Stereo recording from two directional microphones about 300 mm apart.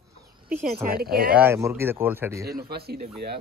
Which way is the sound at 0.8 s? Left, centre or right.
Right.